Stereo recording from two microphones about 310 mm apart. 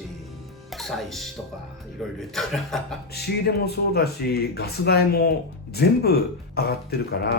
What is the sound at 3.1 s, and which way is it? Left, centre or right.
Speech, left.